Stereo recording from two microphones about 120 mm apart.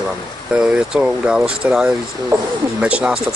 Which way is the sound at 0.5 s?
5° right (ahead or behind).